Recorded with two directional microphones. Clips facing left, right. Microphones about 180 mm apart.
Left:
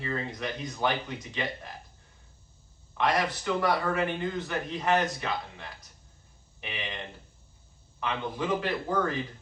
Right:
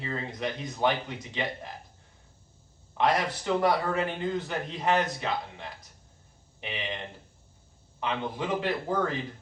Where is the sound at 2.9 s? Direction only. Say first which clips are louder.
Right 1 dB; 25° right (ahead or behind).